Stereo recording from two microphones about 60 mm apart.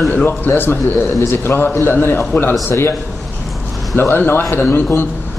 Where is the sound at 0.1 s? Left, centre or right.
Left.